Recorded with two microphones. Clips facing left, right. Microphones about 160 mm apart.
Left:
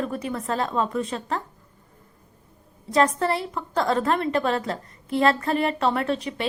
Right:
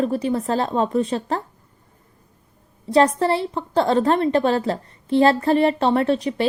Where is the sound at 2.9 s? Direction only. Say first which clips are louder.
Right 4 dB; 30° right (ahead or behind).